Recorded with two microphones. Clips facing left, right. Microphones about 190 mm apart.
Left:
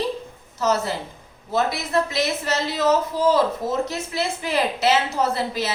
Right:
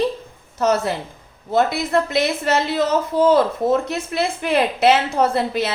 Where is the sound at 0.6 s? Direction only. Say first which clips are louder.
Right 3 dB; 55° right (ahead or behind).